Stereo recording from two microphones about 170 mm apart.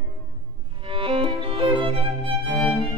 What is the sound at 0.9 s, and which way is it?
Music, 30° right (ahead or behind).